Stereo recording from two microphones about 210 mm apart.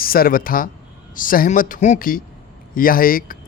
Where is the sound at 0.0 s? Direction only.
45° left (ahead or behind).